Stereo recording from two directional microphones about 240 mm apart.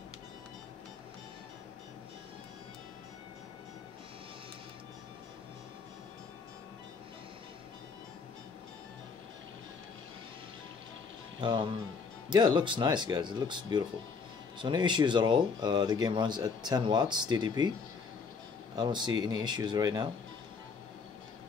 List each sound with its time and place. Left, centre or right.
11.4 s speech: centre
18.8 s speech: centre